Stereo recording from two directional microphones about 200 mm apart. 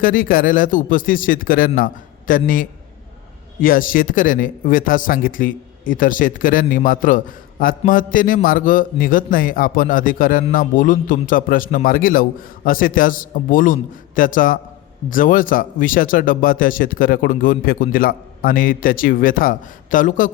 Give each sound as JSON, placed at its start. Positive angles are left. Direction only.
{"t": 0.0, "sound": "speech", "side_deg": 45}